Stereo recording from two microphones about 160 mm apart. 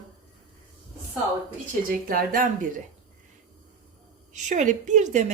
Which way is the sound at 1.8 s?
60° right (ahead or behind).